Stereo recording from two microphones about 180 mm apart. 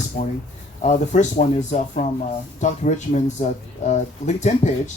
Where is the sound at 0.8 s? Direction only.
40° left (ahead or behind).